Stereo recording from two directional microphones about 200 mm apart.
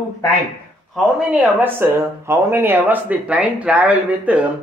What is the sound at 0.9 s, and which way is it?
Speech, centre (ahead or behind).